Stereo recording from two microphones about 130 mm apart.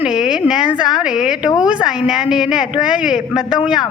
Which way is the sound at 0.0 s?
5° right (ahead or behind).